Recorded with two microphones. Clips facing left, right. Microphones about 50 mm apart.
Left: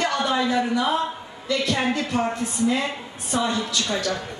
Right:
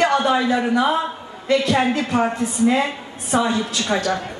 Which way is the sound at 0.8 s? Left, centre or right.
Right.